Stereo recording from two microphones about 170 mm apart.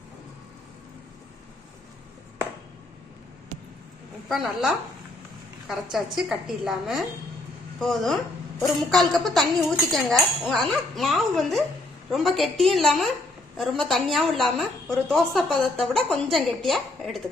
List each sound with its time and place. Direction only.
4.3 s a woman's voice: centre (ahead or behind)